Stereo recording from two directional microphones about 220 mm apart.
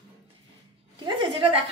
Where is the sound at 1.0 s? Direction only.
25° right (ahead or behind).